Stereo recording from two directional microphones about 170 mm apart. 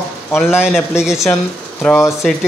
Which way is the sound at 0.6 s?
5° right (ahead or behind).